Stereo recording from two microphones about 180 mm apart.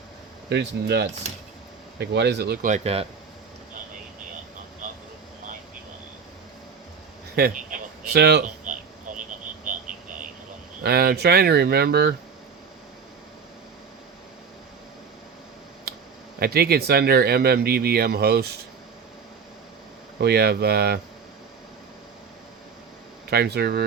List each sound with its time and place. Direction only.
0.5 s speech: 70° right (ahead or behind); by 3.1 s 35° right (ahead or behind)
7.3 s speech: 50° right (ahead or behind)
8.1 s speech: 65° right (ahead or behind)
8.6 s a sound: 45° right (ahead or behind)
10.8 s speech: 60° right (ahead or behind)
16.4 s speech: 60° right (ahead or behind)
20.1 s speech: 65° right (ahead or behind)
23.3 s speech: 65° right (ahead or behind)